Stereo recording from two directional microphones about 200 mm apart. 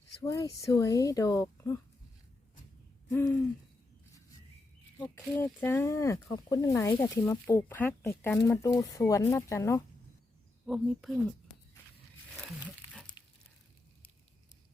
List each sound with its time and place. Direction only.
0.2 s speech: 15° left (ahead or behind)
3.1 s speech: 10° left (ahead or behind)
5.5 s speech: 10° left (ahead or behind)
10.7 s speech: centre (ahead or behind)
13.2 s a sound: 20° left (ahead or behind)